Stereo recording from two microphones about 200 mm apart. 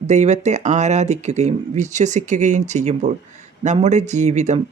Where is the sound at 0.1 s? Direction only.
35° right (ahead or behind).